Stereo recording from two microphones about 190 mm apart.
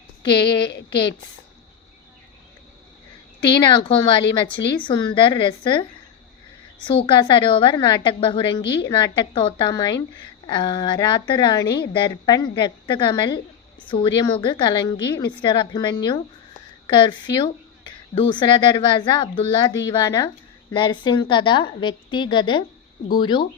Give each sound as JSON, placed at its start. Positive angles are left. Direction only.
{"t": 0.7, "sound": "a woman's voice", "side_deg": 60}
{"t": 3.6, "sound": "speech", "side_deg": 25}
{"t": 6.8, "sound": "speech", "side_deg": 25}
{"t": 8.6, "sound": "a woman's voice", "side_deg": 60}
{"t": 8.9, "sound": "speech", "side_deg": 25}